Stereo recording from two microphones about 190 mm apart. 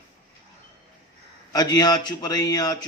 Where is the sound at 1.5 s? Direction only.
20° left (ahead or behind).